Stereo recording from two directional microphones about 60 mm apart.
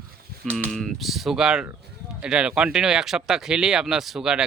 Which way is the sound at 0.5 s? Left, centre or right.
Centre.